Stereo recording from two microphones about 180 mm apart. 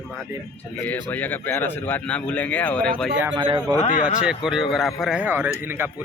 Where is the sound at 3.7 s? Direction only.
45° left (ahead or behind).